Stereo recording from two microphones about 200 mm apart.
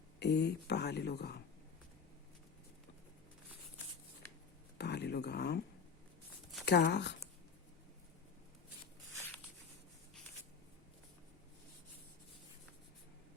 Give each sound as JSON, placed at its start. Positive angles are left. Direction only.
{"t": 0.2, "sound": "speech", "side_deg": 55}
{"t": 4.8, "sound": "a sound", "side_deg": 55}
{"t": 6.7, "sound": "speech", "side_deg": 55}